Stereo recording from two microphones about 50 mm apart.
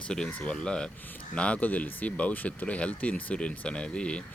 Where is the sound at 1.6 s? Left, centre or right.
Left; by 4.2 s centre.